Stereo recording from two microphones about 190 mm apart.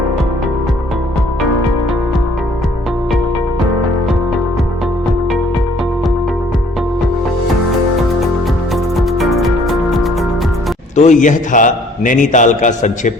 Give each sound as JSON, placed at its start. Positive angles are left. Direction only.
{"t": 9.0, "sound": "music", "side_deg": 0}
{"t": 10.9, "sound": "a man's voice", "side_deg": 40}